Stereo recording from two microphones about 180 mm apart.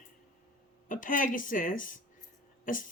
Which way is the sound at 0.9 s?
45° left (ahead or behind).